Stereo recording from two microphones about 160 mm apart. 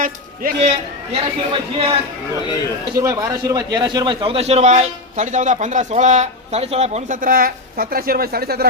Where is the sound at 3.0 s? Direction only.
20° right (ahead or behind).